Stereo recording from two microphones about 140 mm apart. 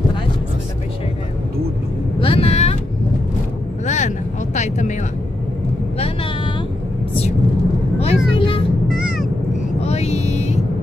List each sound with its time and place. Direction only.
2.1 s vehicle: 40° left (ahead or behind)
3.8 s vehicle: 60° left (ahead or behind)
5.9 s vehicle: 45° left (ahead or behind)
8.0 s vehicle: 45° left (ahead or behind)
8.9 s cat: 5° right (ahead or behind)
9.8 s vehicle: 50° left (ahead or behind)